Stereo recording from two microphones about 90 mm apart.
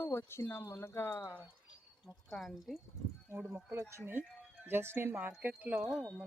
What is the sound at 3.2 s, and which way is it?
Speech, 20° right (ahead or behind).